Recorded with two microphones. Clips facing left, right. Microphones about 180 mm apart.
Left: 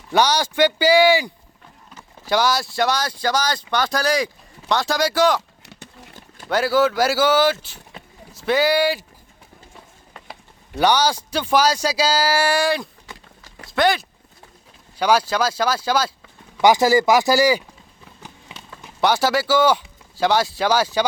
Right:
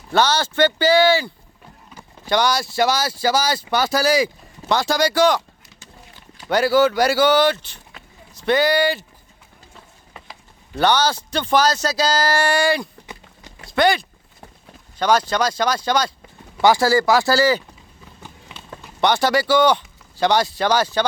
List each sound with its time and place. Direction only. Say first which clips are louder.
0.1 s speech: even; 10° left (ahead or behind)
6.5 s speech: right 2 dB; centre (ahead or behind)
10.8 s speech: even; 10° left (ahead or behind)
16.6 s speech: left 1 dB; 15° left (ahead or behind)
18.9 s speech: right 1 dB; 5° left (ahead or behind)